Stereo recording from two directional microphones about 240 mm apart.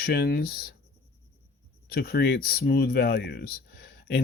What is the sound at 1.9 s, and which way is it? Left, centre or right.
Speech, left.